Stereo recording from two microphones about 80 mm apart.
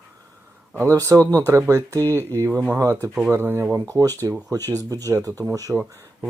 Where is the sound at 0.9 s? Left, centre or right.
Right.